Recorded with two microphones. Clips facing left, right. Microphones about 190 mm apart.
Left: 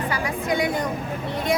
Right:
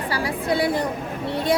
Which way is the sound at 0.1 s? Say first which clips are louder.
Right 5 dB; 35° right (ahead or behind).